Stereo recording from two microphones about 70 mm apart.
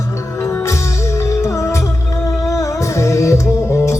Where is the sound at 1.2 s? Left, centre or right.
Left.